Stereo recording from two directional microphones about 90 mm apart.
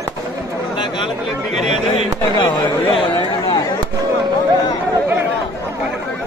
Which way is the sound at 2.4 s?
65° left (ahead or behind).